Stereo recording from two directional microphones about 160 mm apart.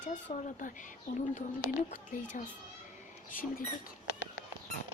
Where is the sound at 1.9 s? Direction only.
50° left (ahead or behind).